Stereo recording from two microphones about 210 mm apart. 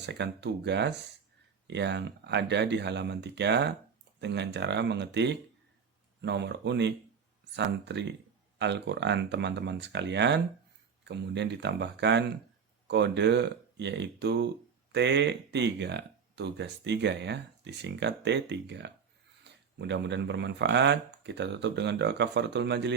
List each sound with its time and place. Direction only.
0.0 s speech: 55° right (ahead or behind)